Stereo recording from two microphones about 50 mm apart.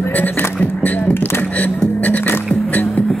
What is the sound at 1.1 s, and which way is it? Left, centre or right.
Beatboxing, left.